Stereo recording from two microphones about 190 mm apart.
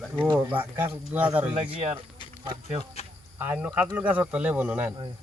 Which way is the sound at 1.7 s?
30° right (ahead or behind).